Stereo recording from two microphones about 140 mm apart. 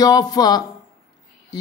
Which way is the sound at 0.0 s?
30° left (ahead or behind).